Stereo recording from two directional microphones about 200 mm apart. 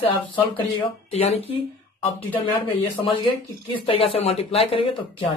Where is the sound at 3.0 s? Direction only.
25° left (ahead or behind).